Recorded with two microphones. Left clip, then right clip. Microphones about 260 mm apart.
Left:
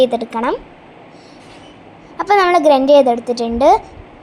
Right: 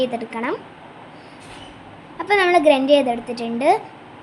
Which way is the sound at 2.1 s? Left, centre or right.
Centre.